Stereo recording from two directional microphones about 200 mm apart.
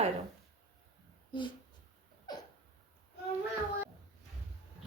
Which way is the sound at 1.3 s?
25° left (ahead or behind).